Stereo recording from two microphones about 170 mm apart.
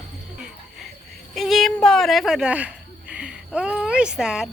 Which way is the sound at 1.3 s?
Centre (ahead or behind).